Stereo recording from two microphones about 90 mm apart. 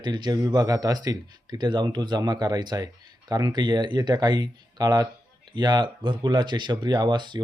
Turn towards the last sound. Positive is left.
turn(degrees=-55)  # may be behind; listen again after turning